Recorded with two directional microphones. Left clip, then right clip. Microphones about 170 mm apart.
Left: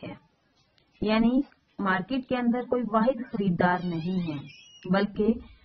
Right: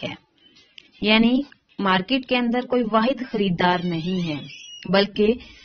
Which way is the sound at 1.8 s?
25° right (ahead or behind).